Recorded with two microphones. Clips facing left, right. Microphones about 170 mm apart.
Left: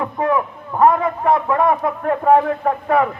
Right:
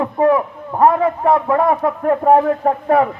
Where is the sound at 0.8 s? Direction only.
35° right (ahead or behind).